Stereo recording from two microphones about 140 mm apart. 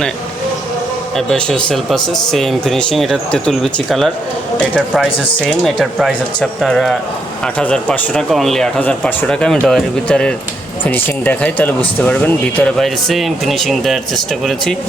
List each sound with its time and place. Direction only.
1.1 s speech: 5° left (ahead or behind)
5.1 s speech: 35° left (ahead or behind)
5.4 s speech: 5° left (ahead or behind)